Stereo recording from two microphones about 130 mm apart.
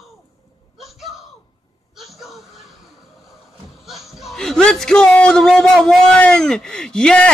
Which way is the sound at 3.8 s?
Centre (ahead or behind).